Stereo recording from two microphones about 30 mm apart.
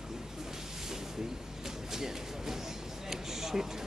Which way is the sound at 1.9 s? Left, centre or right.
Centre.